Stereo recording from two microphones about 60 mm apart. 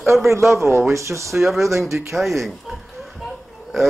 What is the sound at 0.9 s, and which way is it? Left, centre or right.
Speech, right.